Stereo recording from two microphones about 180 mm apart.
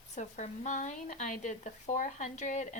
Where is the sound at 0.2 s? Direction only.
40° left (ahead or behind).